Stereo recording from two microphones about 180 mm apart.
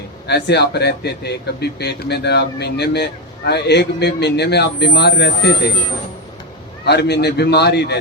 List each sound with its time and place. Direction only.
0.3 s speech: 70° left (ahead or behind)
6.8 s speech: 65° left (ahead or behind)